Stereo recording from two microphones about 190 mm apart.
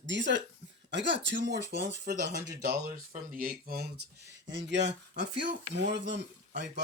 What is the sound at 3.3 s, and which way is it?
Speech, 50° right (ahead or behind).